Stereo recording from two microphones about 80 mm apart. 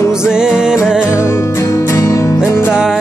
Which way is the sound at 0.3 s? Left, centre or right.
Centre.